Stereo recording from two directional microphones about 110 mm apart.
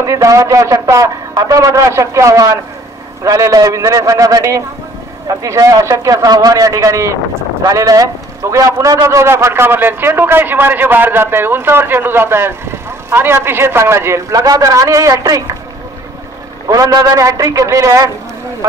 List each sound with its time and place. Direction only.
0.0 s a man's voice: 30° right (ahead or behind)
16.6 s a man's voice: 35° right (ahead or behind)